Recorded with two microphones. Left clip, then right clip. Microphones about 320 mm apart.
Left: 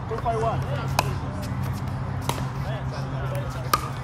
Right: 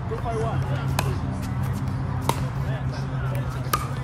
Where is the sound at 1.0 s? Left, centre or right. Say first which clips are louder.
Left 4 dB; centre.